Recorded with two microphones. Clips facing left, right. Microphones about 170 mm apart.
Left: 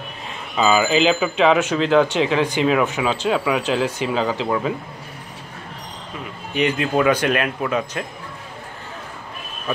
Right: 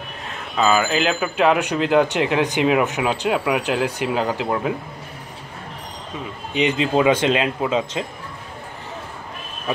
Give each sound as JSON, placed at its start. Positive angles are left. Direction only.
{"t": 0.6, "sound": "speech", "side_deg": 5}
{"t": 6.5, "sound": "a man's voice", "side_deg": -20}